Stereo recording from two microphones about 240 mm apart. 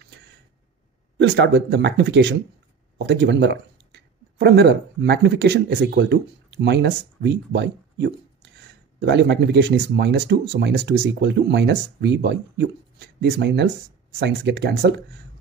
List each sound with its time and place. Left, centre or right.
1.2 s speech: right